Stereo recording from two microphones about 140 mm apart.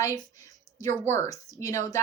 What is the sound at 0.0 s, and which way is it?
A woman's voice, 25° left (ahead or behind).